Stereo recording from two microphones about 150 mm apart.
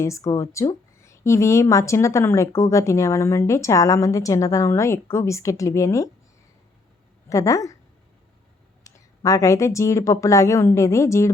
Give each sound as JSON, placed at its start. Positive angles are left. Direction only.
{"t": 0.0, "sound": "a woman's voice", "side_deg": 20}
{"t": 7.3, "sound": "a woman's voice", "side_deg": 20}
{"t": 8.8, "sound": "a woman's voice", "side_deg": 20}